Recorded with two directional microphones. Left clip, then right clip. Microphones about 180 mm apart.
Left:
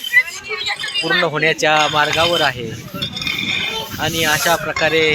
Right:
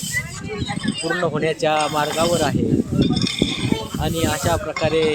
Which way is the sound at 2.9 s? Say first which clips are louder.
Right 2 dB; 20° right (ahead or behind).